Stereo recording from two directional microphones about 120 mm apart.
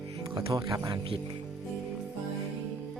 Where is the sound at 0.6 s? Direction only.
30° right (ahead or behind).